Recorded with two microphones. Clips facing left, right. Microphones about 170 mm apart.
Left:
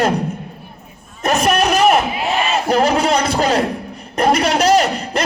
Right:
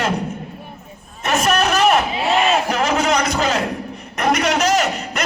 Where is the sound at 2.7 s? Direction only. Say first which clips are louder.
Left 4 dB; 35° left (ahead or behind).